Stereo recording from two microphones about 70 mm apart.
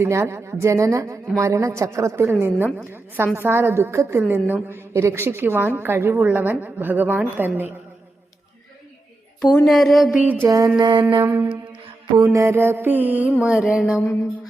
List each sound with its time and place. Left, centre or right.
0.0 s a woman's voice: right
4.2 s a woman's voice: right
4.9 s a woman's voice: right
9.6 s a sound: centre
10.4 s a woman's voice: right
10.8 s a sound: right
11.0 s a woman's voice: right
12.2 s a woman's voice: right
12.5 s a woman's voice: right
13.4 s mantra: centre